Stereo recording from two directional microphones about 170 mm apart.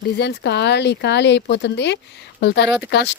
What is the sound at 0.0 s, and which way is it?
Speech, 75° left (ahead or behind).